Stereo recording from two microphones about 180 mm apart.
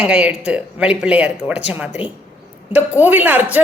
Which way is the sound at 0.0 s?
5° right (ahead or behind).